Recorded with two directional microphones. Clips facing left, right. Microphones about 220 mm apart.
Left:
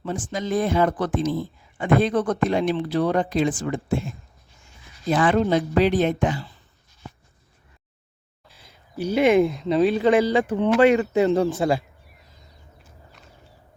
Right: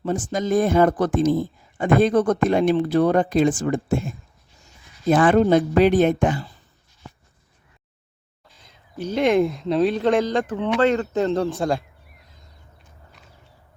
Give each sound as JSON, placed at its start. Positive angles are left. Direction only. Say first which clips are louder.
{"t": 0.0, "sound": "speech", "louder": "right 4 dB", "side_deg": -45}
{"t": 8.6, "sound": "speech", "louder": "left 2 dB", "side_deg": 10}
{"t": 13.1, "sound": "a sound", "louder": "even", "side_deg": 0}